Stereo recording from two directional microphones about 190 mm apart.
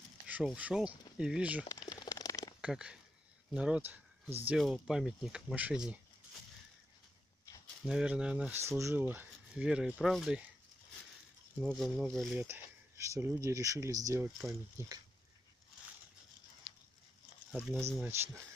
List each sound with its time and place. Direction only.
0.3 s speech: 5° right (ahead or behind)
1.7 s a sound: 20° left (ahead or behind)
2.6 s speech: 5° right (ahead or behind)
7.8 s speech: 5° right (ahead or behind)
11.6 s speech: centre (ahead or behind)
17.5 s speech: centre (ahead or behind)
18.0 s speech: 10° right (ahead or behind)